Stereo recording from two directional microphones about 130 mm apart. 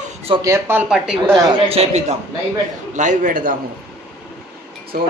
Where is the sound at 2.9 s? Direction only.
70° right (ahead or behind); by 3.5 s 90° right.